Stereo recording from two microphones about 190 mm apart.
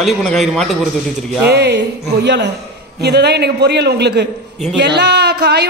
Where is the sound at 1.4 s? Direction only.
60° right (ahead or behind).